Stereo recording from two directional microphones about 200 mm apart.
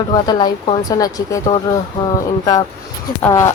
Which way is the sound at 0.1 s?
20° left (ahead or behind).